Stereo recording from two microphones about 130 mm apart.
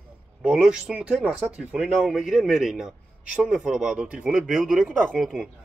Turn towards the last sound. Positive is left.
turn(degrees=-10)  # may be behind; listen again after turning